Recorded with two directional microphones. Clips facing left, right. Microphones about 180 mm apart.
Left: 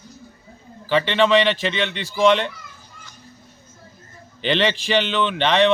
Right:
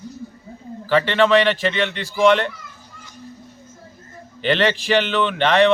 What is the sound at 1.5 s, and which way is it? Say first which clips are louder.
Speech: right 2 dB; centre (ahead or behind).